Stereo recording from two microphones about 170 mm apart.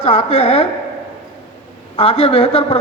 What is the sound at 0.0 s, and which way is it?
Speech, 35° left (ahead or behind).